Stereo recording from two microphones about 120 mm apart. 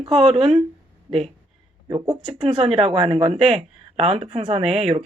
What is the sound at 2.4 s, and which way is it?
Speech, 50° right (ahead or behind).